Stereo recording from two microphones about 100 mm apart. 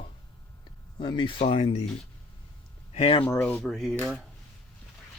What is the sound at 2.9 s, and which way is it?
Speech, 80° left.